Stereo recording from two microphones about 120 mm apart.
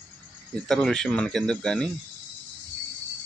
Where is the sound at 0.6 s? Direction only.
5° left (ahead or behind).